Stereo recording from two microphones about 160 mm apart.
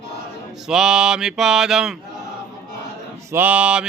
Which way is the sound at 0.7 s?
5° right (ahead or behind).